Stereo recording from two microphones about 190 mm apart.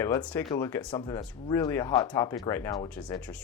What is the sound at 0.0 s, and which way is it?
Speech, 15° left (ahead or behind).